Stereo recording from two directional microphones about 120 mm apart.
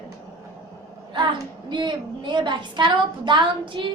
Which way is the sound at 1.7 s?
40° right (ahead or behind).